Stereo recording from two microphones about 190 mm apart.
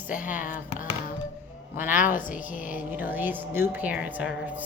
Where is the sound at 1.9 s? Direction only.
45° left (ahead or behind).